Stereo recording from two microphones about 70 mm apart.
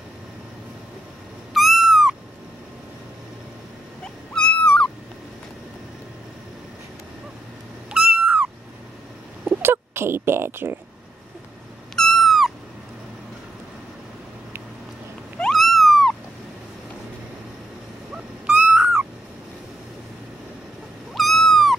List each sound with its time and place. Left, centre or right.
1.5 s owl: centre
4.0 s a sound: centre
7.9 s cat: centre
9.4 s a sound: right
11.9 s cat: centre
15.5 s cat: centre
18.1 s owl: centre
21.1 s cat: centre